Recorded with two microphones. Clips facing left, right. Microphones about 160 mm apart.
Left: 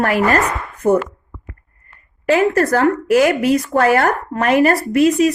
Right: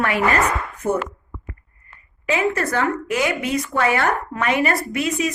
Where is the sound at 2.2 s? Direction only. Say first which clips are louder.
Left 7 dB; 40° left (ahead or behind).